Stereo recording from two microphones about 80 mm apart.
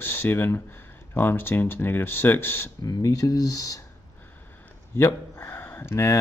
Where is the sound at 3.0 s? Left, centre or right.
Left.